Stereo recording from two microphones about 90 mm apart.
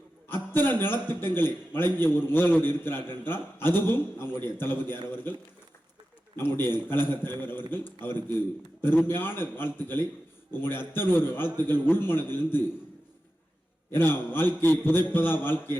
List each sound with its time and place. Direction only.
0.5 s a man's voice: 25° left (ahead or behind)
13.9 s a man's voice: 25° left (ahead or behind)